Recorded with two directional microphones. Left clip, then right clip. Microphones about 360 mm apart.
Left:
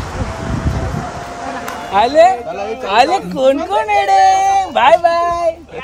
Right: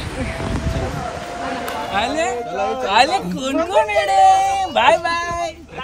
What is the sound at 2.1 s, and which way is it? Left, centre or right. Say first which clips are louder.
Speech: left 11 dB; centre.